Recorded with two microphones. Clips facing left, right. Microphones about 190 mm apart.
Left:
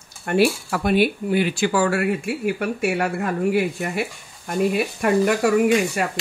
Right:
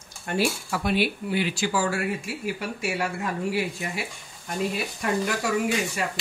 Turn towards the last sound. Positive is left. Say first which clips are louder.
# left 8 dB
turn(degrees=60)  # may be behind; listen again after turning